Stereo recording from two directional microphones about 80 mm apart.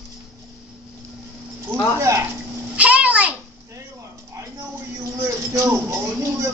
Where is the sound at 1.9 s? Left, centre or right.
Right.